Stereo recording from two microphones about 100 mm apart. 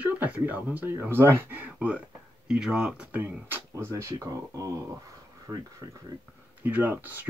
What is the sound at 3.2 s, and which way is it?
Speech, 20° right (ahead or behind).